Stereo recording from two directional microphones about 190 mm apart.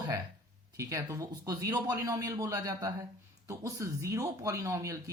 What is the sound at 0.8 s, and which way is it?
Speech, 15° right (ahead or behind).